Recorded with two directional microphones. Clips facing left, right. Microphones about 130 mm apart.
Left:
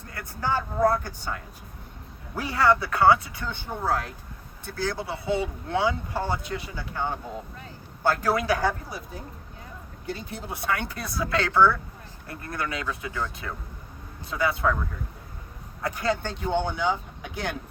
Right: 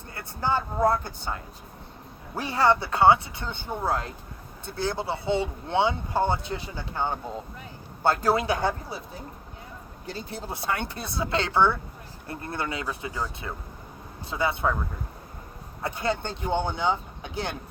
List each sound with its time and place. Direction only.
0.1 s speech: 25° right (ahead or behind)
10.1 s speech: 30° right (ahead or behind)
15.8 s speech: 25° right (ahead or behind)